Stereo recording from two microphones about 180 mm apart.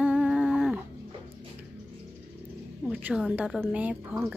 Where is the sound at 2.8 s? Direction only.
10° right (ahead or behind).